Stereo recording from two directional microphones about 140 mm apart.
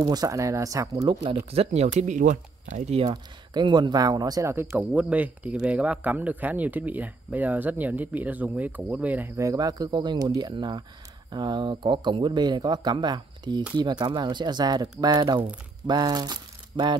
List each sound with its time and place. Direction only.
0.0 s speech: 30° right (ahead or behind)
1.0 s speech: 35° right (ahead or behind)
1.5 s speech: 50° right (ahead or behind)
3.1 s speech: 30° right (ahead or behind)